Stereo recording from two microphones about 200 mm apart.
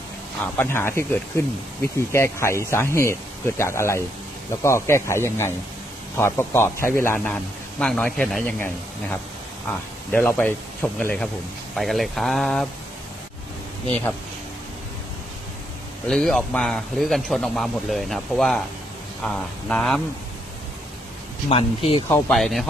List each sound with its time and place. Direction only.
0.5 s a man's voice: 10° left (ahead or behind)
16.0 s a man's voice: centre (ahead or behind)
21.5 s speech: 30° left (ahead or behind)
22.1 s a man's voice: centre (ahead or behind)